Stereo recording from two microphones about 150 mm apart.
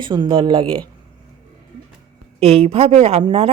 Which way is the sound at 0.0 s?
30° right (ahead or behind).